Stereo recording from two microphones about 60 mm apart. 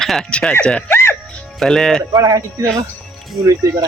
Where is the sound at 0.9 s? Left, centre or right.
Left.